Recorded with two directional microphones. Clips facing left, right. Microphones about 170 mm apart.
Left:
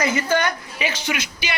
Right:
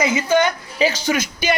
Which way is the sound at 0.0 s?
15° right (ahead or behind).